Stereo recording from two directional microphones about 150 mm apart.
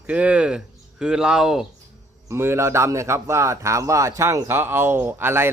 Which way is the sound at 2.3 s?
15° right (ahead or behind).